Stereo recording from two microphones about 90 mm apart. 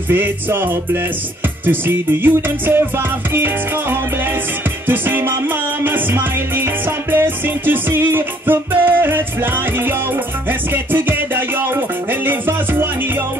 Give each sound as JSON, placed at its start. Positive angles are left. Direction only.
{"t": 0.1, "sound": "music", "side_deg": -25}